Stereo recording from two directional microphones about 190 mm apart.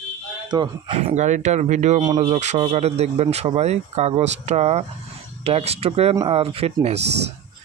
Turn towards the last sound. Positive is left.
turn(degrees=-35)  # may be behind; listen again after turning